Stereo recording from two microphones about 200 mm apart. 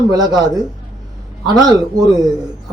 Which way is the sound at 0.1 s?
20° right (ahead or behind).